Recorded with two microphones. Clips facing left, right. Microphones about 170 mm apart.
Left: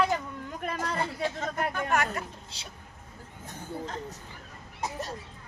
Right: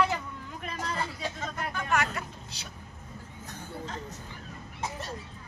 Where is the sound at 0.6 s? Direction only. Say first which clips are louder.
Left 3 dB; 50° left (ahead or behind).